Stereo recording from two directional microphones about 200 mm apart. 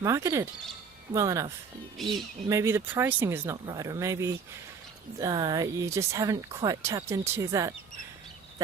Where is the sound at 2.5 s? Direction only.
15° right (ahead or behind).